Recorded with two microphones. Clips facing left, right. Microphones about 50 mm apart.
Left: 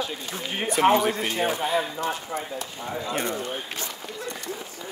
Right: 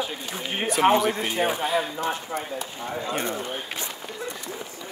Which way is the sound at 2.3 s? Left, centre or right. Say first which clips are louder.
Right 1 dB; right.